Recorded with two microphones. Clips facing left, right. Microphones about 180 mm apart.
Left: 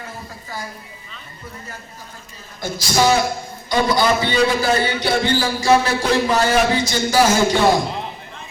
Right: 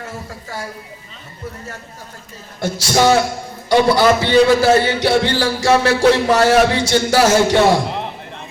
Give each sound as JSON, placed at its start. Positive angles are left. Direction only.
{"t": 2.6, "sound": "a man's voice", "side_deg": -70}